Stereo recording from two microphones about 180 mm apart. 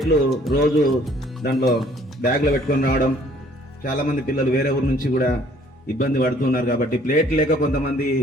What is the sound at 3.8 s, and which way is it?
Speech, 50° left (ahead or behind).